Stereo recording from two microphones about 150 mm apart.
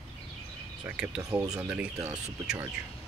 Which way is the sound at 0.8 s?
10° right (ahead or behind).